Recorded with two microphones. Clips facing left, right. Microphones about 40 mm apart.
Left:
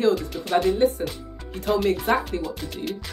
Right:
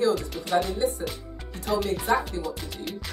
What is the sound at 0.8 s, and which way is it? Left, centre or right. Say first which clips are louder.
Speech: left 6 dB; left.